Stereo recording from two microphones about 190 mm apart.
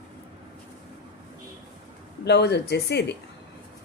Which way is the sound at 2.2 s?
60° left (ahead or behind).